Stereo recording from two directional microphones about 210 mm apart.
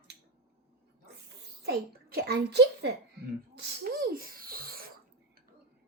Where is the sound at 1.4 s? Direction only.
50° right (ahead or behind).